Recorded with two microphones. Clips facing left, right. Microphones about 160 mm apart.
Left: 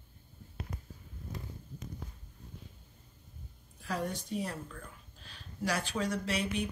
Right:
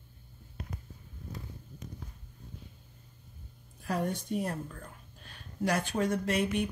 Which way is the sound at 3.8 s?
50° right (ahead or behind).